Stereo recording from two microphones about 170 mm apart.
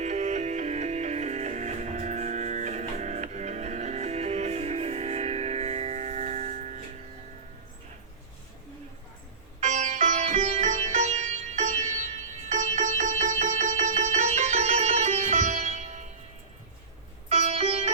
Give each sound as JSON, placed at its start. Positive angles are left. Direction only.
{"t": 0.0, "sound": "music", "side_deg": -45}
{"t": 9.6, "sound": "sitar", "side_deg": -45}
{"t": 17.2, "sound": "music", "side_deg": -40}